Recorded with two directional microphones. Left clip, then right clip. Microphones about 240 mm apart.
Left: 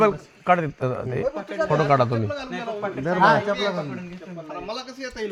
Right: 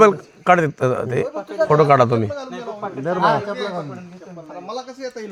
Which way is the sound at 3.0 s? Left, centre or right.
Centre.